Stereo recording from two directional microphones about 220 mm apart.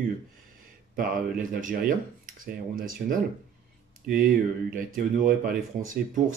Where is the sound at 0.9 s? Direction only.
40° right (ahead or behind).